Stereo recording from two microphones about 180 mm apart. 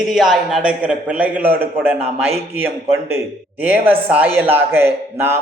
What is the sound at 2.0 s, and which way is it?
Speech, 35° right (ahead or behind).